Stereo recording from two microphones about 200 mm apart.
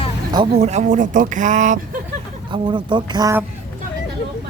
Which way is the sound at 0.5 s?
35° right (ahead or behind).